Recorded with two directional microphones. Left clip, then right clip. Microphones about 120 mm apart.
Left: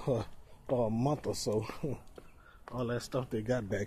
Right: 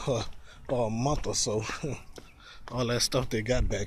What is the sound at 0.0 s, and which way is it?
Speech, 45° left (ahead or behind).